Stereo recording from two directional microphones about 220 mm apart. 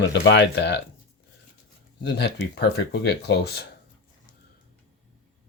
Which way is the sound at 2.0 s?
50° left (ahead or behind).